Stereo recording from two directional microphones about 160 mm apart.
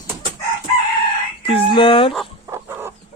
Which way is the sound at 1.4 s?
35° left (ahead or behind).